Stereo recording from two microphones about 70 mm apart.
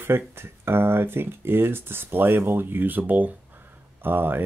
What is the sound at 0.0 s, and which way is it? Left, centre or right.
Speech, right.